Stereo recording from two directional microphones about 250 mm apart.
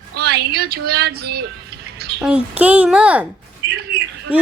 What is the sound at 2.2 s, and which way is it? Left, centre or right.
Speech, centre.